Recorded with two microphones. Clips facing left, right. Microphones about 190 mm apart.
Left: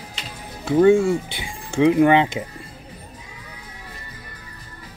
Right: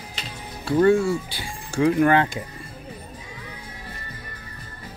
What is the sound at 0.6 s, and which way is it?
Speech, 15° left (ahead or behind).